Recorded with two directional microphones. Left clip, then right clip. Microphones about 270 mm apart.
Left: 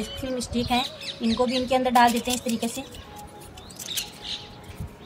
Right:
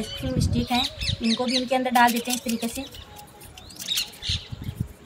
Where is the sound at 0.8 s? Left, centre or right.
Right.